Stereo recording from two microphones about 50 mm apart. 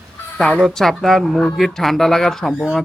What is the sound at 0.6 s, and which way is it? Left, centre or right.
Speech, centre.